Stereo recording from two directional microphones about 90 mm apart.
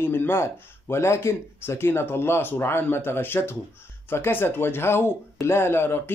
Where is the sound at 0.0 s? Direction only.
25° left (ahead or behind).